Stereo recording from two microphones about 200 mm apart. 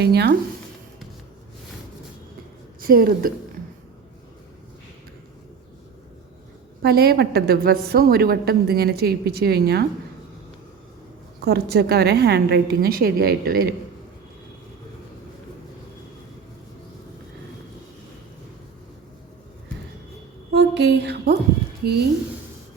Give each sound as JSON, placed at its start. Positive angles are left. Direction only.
{"t": 0.0, "sound": "a woman's voice", "side_deg": -55}
{"t": 2.8, "sound": "a woman's voice", "side_deg": -45}
{"t": 6.8, "sound": "a woman's voice", "side_deg": -50}
{"t": 11.3, "sound": "a woman's voice", "side_deg": -50}
{"t": 20.5, "sound": "a sound", "side_deg": -55}
{"t": 21.8, "sound": "a woman's voice", "side_deg": -55}